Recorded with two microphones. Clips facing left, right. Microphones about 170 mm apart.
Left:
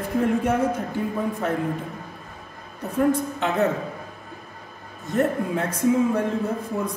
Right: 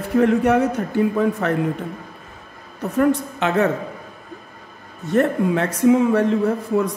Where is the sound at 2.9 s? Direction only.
75° right (ahead or behind).